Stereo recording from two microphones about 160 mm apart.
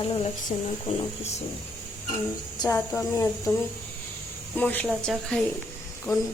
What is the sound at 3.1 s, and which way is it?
Speech, 15° left (ahead or behind).